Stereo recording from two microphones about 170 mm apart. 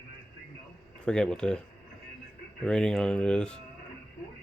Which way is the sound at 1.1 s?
5° left (ahead or behind).